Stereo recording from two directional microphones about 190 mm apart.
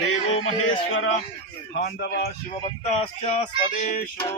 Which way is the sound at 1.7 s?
60° left (ahead or behind).